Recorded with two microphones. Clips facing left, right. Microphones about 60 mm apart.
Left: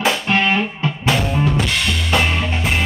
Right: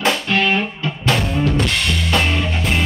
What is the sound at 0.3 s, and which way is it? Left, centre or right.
Music, left.